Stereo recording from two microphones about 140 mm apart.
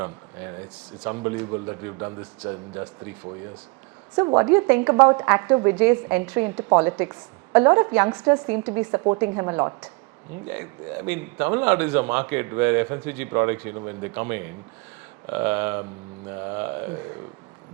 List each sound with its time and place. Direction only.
0.0 s speech: 15° right (ahead or behind)
4.4 s speech: 15° right (ahead or behind)